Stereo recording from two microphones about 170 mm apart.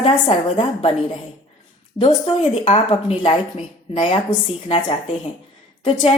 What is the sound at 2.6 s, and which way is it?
A woman's voice, 40° left (ahead or behind).